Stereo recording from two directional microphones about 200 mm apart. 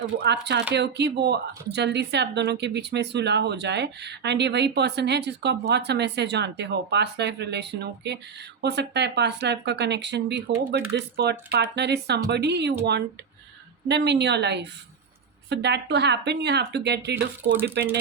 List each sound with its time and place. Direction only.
0.2 s speech: 60° right (ahead or behind)
13.8 s speech: 55° right (ahead or behind)